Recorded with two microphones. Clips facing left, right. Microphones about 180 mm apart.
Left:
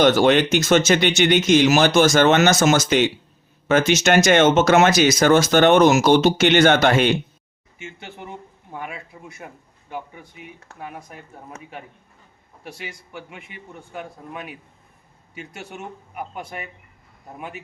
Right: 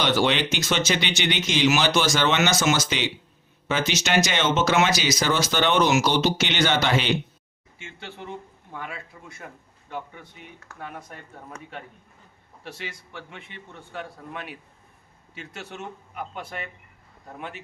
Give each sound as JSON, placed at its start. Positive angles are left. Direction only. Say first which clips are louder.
{"t": 0.0, "sound": "speech", "louder": "left 7 dB", "side_deg": 45}
{"t": 7.8, "sound": "speech", "louder": "left 3 dB", "side_deg": 15}
{"t": 15.4, "sound": "speech", "louder": "left 2 dB", "side_deg": 15}